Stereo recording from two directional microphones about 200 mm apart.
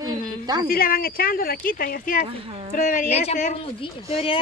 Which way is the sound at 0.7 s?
45° left (ahead or behind).